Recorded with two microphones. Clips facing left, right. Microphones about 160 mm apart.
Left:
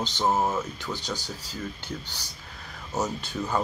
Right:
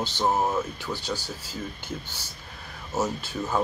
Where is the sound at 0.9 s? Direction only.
15° left (ahead or behind).